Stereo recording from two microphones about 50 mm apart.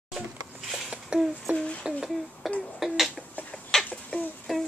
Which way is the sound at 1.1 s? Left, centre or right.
Right.